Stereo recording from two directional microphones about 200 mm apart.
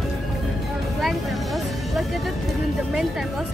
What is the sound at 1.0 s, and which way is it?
Music, centre (ahead or behind).